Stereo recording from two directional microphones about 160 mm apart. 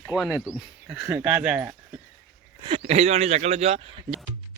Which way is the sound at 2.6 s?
35° right (ahead or behind).